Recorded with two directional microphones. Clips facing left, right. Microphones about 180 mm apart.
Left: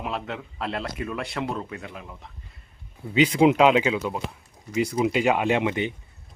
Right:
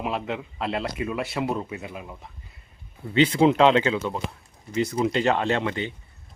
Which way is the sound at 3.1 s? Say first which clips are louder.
Even; 10° left (ahead or behind).